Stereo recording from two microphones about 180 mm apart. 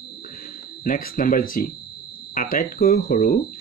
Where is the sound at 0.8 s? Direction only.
50° left (ahead or behind).